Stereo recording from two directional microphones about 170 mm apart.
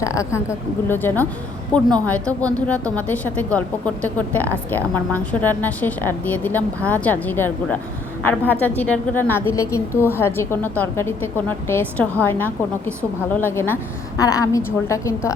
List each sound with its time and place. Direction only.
0.0 s a woman's voice: 20° left (ahead or behind)